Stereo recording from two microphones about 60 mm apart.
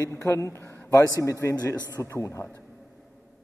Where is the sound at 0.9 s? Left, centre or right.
Left.